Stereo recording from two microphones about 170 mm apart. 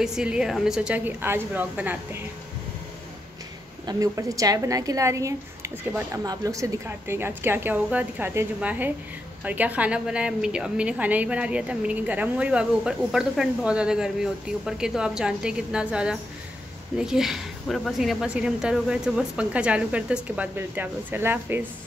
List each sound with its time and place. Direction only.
0.0 s speech: 5° right (ahead or behind)
3.8 s a woman's voice: 20° right (ahead or behind)